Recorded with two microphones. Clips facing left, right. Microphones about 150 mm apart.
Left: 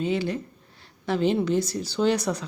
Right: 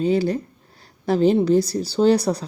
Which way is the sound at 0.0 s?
40° right (ahead or behind).